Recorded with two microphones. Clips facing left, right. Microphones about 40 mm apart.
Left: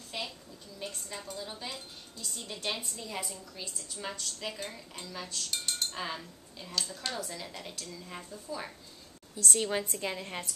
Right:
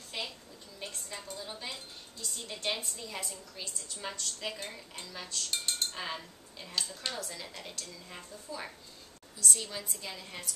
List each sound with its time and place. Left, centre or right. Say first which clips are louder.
0.1 s a sound: left 1 dB; centre
0.7 s a woman's voice: left 2 dB; centre
9.6 s a woman's voice: left 9 dB; left